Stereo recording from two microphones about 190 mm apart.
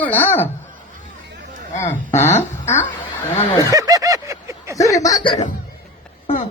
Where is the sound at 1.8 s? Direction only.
15° left (ahead or behind).